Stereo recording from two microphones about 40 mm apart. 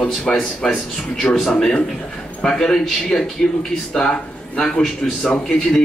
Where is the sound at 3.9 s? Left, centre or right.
Left.